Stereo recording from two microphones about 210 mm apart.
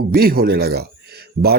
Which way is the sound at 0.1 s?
45° right (ahead or behind).